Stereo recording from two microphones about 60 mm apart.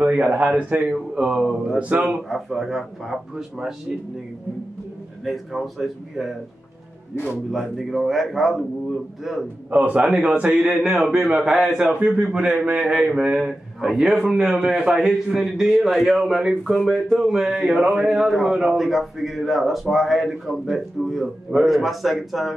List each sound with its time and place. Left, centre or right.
0.1 s a man's voice: right
0.9 s a man's voice: centre
1.8 s a man's voice: right
2.2 s a man's voice: centre
5.2 s a man's voice: centre
7.5 s a man's voice: centre
9.7 s a man's voice: right
10.6 s a man's voice: centre
12.0 s a man's voice: centre